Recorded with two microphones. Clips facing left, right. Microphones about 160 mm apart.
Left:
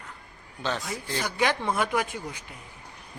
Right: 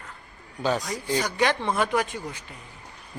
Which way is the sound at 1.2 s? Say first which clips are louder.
Left 1 dB; 10° left (ahead or behind).